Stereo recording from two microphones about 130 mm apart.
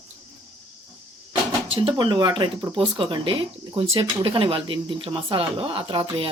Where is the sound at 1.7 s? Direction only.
45° right (ahead or behind).